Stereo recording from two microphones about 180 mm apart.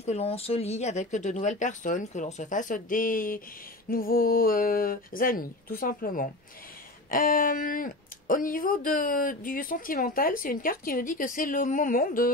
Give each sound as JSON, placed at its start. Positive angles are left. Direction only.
{"t": 0.0, "sound": "speech", "side_deg": 35}